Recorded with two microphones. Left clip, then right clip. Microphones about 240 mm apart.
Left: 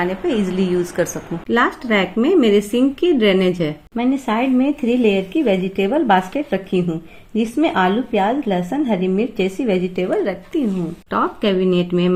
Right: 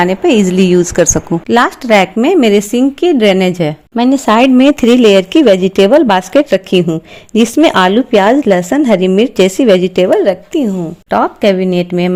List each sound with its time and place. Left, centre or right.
0.0 s a woman's voice: right